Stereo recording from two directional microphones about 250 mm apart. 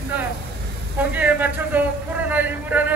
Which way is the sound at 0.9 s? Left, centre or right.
Centre.